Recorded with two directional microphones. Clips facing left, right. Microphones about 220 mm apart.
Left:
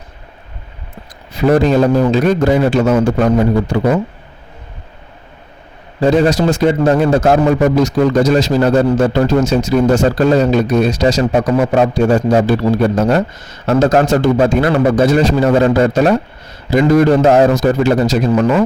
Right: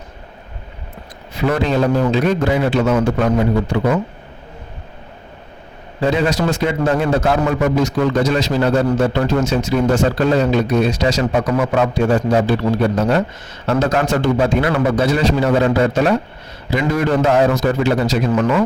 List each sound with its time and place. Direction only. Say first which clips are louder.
1.4 s a man's voice: left 6 dB; 40° left (ahead or behind)
6.0 s a man's voice: left 5 dB; 45° left (ahead or behind)